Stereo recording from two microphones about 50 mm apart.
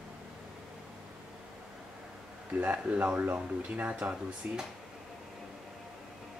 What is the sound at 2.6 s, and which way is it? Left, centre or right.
Speech, right.